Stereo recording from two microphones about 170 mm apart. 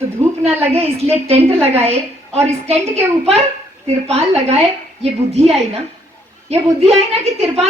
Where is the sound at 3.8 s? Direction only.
40° right (ahead or behind).